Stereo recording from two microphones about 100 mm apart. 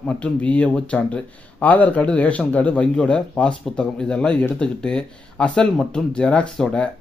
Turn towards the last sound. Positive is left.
turn(degrees=10)  # may be behind; listen again after turning